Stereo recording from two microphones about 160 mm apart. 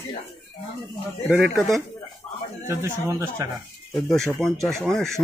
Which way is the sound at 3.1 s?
15° right (ahead or behind).